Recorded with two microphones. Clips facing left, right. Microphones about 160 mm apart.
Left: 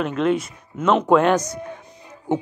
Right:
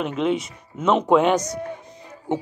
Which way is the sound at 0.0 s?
15° right (ahead or behind).